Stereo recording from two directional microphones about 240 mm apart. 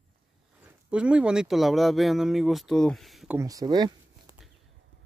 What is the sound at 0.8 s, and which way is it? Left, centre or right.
Speech, centre.